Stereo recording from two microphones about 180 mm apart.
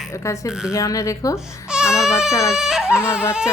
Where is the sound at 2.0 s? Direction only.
5° right (ahead or behind).